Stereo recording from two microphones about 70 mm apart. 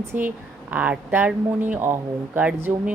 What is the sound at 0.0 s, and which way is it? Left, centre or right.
Speech, right.